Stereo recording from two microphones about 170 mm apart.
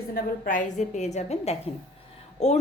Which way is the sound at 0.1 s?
50° left (ahead or behind).